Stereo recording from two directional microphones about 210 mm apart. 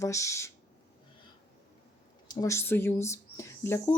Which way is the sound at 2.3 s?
15° left (ahead or behind).